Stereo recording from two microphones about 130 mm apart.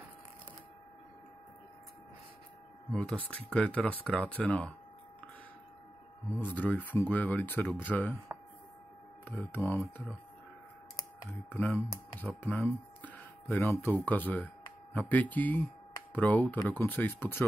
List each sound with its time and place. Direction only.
2.9 s speech: 10° left (ahead or behind)
6.3 s speech: 15° left (ahead or behind)
8.3 s a sound: 15° right (ahead or behind)
9.2 s speech: 15° left (ahead or behind)
11.2 s speech: 15° left (ahead or behind)